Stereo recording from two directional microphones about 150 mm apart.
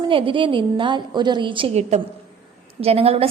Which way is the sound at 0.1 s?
35° right (ahead or behind).